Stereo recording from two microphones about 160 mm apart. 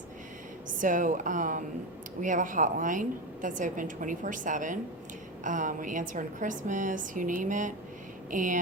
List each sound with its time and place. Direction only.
0.7 s a woman's voice: 55° right (ahead or behind)